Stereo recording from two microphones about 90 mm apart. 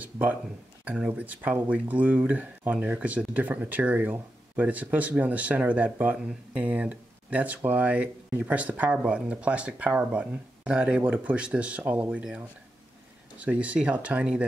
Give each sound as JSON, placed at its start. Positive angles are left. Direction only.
{"t": 0.0, "sound": "speech", "side_deg": -20}